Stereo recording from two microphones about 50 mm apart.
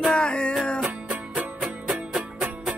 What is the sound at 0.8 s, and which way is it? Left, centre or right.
Music, right.